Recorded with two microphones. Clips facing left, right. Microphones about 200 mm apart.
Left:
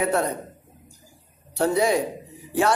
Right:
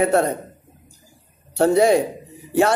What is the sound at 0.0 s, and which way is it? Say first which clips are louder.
Speech: right 5 dB; 50° right (ahead or behind).